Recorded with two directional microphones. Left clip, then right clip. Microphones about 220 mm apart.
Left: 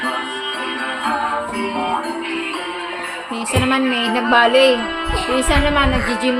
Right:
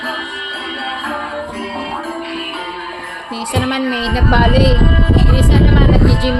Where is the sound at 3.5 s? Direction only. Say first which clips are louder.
Left 1 dB; centre (ahead or behind).